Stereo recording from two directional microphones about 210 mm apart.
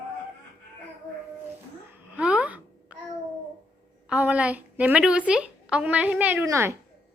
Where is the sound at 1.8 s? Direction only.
10° right (ahead or behind).